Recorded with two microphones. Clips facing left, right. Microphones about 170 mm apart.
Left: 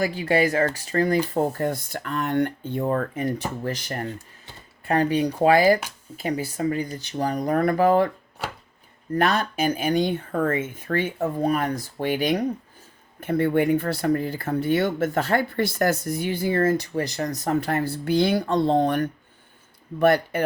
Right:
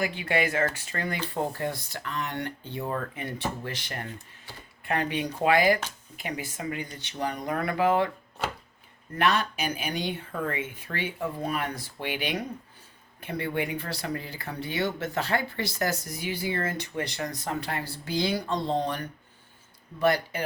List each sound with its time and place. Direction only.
0.0 s speech: 35° left (ahead or behind)
9.1 s speech: 40° left (ahead or behind)